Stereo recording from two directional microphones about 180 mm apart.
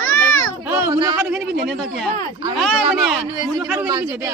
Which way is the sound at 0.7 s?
10° right (ahead or behind).